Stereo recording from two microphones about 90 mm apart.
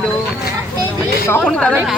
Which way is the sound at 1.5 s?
10° left (ahead or behind).